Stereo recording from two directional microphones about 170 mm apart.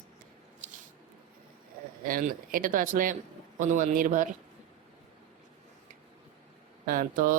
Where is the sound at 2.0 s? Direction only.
55° right (ahead or behind).